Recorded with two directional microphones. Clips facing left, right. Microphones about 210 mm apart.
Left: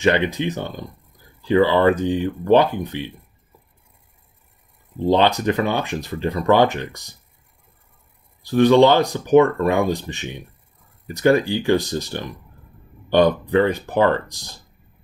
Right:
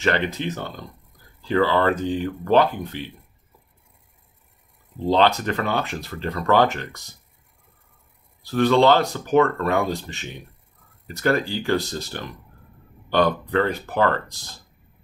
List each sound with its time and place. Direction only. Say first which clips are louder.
0.0 s speech: left 4 dB; 15° left (ahead or behind)
5.0 s speech: left 2 dB; 15° left (ahead or behind)
8.5 s speech: left 4 dB; 15° left (ahead or behind)